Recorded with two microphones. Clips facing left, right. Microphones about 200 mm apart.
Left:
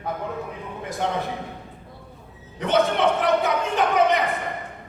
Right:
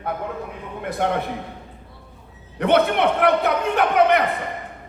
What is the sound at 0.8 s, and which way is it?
Speech, 60° right (ahead or behind).